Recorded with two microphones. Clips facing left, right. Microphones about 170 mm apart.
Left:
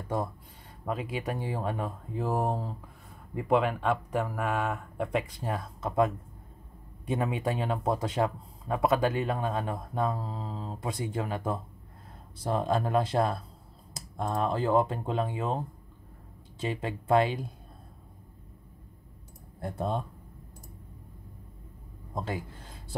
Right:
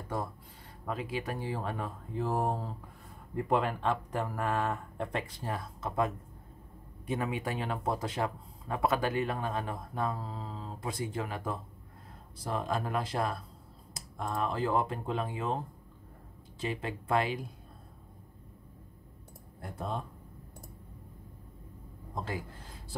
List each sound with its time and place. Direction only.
0.8 s speech: 20° left (ahead or behind)
5.5 s speech: 20° left (ahead or behind)
7.1 s speech: 25° left (ahead or behind)
16.6 s speech: 25° left (ahead or behind)
19.6 s speech: 30° left (ahead or behind)